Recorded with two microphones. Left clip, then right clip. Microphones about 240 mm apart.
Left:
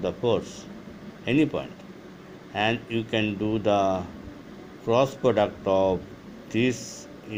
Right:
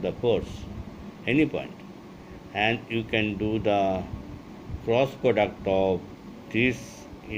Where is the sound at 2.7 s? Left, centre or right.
Left.